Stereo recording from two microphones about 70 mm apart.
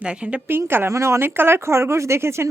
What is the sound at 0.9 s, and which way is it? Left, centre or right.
Speech, right.